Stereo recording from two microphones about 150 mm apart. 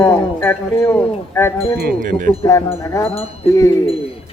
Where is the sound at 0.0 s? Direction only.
15° left (ahead or behind).